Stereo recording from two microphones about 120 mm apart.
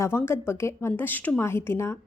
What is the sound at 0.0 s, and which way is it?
A woman's voice, 20° left (ahead or behind).